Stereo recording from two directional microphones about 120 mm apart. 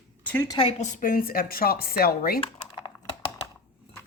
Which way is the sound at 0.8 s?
85° left.